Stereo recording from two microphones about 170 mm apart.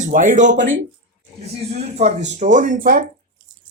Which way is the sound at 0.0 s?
50° right (ahead or behind).